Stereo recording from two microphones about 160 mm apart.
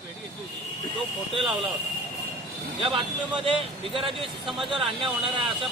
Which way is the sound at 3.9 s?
35° right (ahead or behind).